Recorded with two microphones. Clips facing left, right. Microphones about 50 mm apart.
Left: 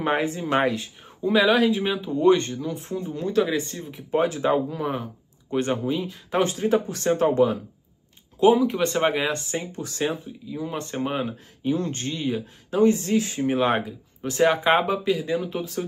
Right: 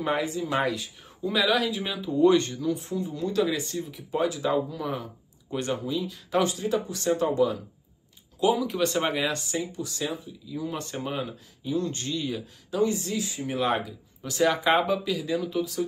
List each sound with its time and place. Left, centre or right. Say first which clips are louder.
0.0 s speech: left 3 dB; left
2.7 s speech: even; left
8.4 s speech: left 6 dB; left
9.6 s speech: left 3 dB; left
10.5 s speech: left 2 dB; left
11.6 s speech: left 3 dB; left
13.5 s speech: left 3 dB; left